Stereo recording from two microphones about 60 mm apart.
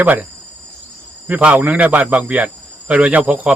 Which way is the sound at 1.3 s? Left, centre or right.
Right.